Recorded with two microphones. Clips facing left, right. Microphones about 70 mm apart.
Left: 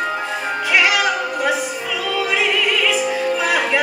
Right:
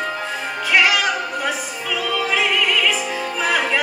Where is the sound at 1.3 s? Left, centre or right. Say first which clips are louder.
Left 4 dB; centre.